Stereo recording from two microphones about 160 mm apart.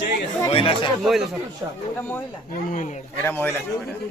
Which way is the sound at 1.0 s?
Centre (ahead or behind).